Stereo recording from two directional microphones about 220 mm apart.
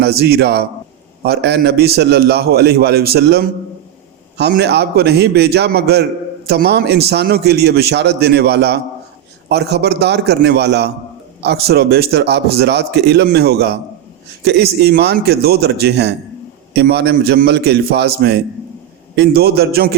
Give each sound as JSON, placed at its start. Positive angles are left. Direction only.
{"t": 0.0, "sound": "a man's voice", "side_deg": -45}